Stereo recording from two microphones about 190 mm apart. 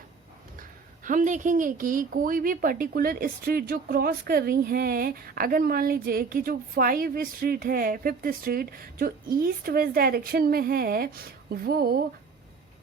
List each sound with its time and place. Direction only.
0.6 s speech: 45° right (ahead or behind)